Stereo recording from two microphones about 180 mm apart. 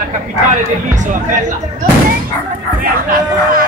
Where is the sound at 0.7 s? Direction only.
45° right (ahead or behind).